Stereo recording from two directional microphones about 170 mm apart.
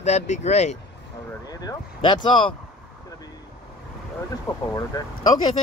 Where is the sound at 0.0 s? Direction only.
40° left (ahead or behind).